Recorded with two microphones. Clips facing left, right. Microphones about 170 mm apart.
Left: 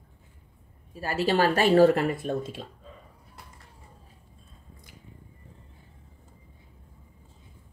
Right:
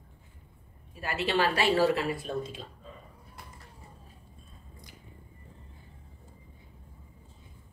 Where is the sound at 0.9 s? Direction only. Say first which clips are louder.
Left 4 dB; 35° left (ahead or behind); by 2.4 s 55° left (ahead or behind).